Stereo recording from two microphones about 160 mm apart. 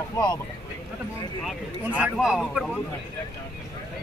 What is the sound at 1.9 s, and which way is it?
Speech, 5° right (ahead or behind).